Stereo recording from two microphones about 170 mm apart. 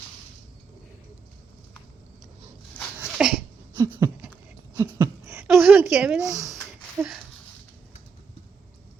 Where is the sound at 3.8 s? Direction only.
20° right (ahead or behind).